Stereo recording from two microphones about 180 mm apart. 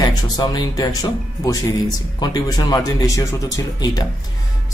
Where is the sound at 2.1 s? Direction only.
20° left (ahead or behind).